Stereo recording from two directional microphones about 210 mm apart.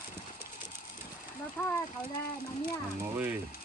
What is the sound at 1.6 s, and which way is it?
Speech, 10° left (ahead or behind).